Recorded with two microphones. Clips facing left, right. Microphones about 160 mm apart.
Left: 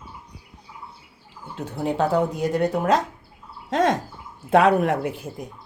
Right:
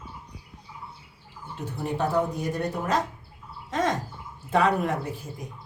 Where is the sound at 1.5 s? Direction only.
90° left.